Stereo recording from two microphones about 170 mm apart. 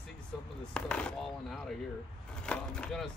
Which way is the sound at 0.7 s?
5° left (ahead or behind).